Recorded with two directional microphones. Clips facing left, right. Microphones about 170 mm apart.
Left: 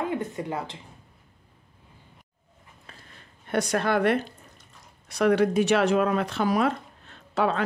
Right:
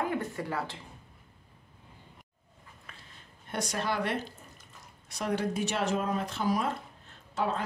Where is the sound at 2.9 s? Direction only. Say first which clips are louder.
Left 3 dB; 30° left (ahead or behind).